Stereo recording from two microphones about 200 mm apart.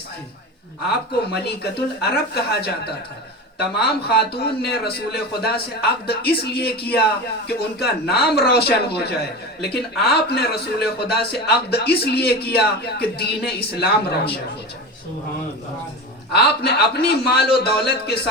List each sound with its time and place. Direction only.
1.3 s speech: 55° left (ahead or behind)
16.3 s speech: 55° left (ahead or behind)